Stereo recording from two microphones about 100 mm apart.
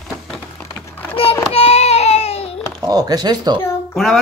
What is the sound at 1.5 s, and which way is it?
Baby cry, 85° left.